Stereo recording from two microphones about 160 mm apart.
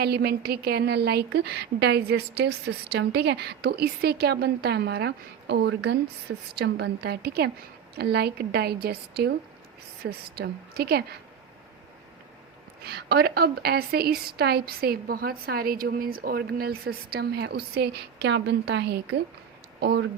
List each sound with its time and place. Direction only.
0.0 s a woman's voice: 85° right
12.8 s a woman's voice: 80° right